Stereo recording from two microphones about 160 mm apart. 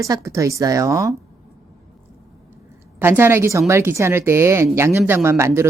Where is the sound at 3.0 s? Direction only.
15° right (ahead or behind).